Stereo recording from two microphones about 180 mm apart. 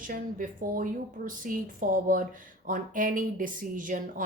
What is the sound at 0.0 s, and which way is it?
Speech, 50° right (ahead or behind).